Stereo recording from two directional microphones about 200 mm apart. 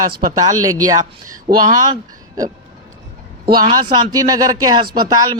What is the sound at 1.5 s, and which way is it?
Speech, 30° right (ahead or behind).